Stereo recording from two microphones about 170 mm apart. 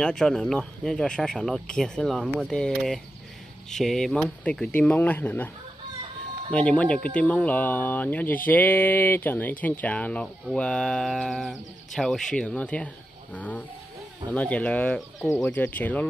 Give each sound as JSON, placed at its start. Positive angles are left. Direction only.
{"t": 0.0, "sound": "speech", "side_deg": 5}
{"t": 6.5, "sound": "speech", "side_deg": 5}